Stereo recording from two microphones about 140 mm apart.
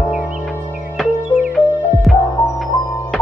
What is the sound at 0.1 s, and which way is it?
Music, 5° right (ahead or behind).